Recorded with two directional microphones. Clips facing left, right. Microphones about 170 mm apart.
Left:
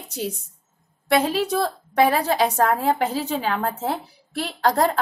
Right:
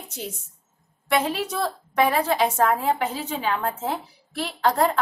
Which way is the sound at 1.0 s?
35° left (ahead or behind).